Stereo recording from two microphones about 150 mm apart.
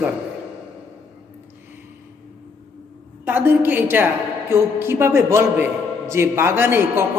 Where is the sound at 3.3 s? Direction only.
15° right (ahead or behind).